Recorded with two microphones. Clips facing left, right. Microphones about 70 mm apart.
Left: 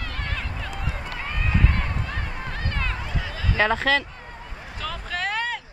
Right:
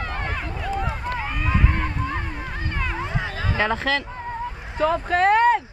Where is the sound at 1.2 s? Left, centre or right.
Centre.